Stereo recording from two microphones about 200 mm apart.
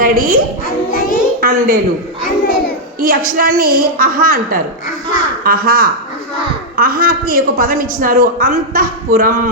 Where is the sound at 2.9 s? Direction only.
45° right (ahead or behind).